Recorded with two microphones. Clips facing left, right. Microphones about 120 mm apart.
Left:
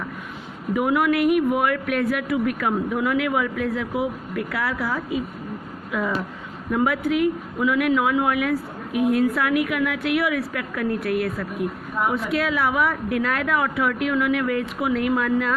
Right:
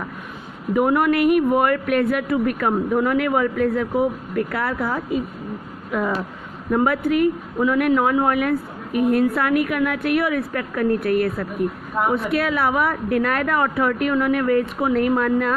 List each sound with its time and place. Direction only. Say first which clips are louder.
0.7 s a woman's voice: right 3 dB; 45° right (ahead or behind)